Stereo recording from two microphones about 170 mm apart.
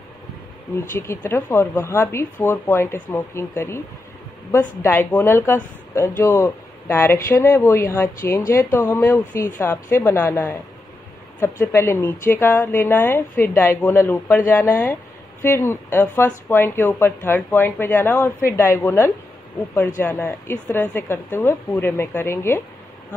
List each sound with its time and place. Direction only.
0.7 s speech: 15° left (ahead or behind)
4.8 s speech: 10° left (ahead or behind)